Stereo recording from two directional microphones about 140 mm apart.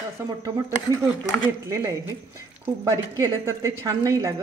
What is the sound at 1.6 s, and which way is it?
Speech, 20° right (ahead or behind).